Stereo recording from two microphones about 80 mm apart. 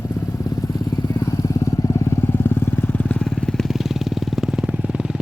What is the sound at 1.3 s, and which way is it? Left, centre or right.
Vehicle, left.